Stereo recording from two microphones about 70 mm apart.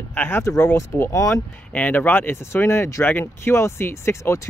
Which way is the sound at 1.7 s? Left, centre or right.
Left.